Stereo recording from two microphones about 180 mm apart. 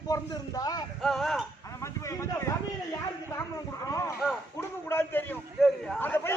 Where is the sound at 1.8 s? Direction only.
15° left (ahead or behind).